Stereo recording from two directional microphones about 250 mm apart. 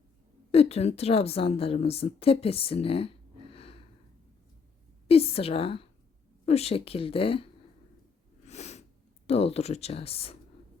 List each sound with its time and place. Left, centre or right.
0.5 s a woman's voice: left
3.5 s a sound: left
5.0 s a sound: left
6.4 s a woman's voice: left
8.4 s sneeze: left
9.2 s a woman's voice: left